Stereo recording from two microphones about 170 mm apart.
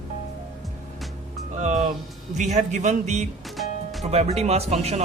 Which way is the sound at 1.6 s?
45° right (ahead or behind).